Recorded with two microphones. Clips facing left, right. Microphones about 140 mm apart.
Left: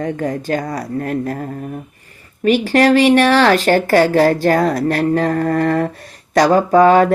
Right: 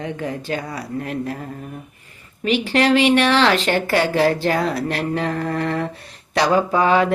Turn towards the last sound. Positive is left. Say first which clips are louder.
# left 6 dB
turn(degrees=45)  # may be behind; listen again after turning